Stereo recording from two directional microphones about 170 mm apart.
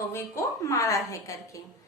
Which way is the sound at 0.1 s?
15° left (ahead or behind).